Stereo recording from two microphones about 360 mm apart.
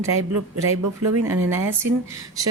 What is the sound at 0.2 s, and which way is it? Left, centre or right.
Speech, right.